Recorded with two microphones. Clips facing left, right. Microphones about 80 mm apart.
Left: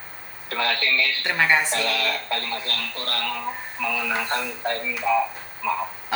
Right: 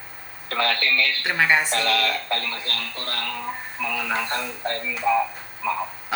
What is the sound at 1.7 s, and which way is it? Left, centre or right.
Speech, right.